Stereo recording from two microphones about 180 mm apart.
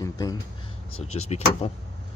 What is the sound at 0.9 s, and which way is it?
Speech, 35° left (ahead or behind).